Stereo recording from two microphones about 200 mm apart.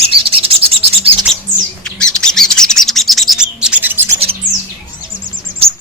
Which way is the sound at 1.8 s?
5° left (ahead or behind).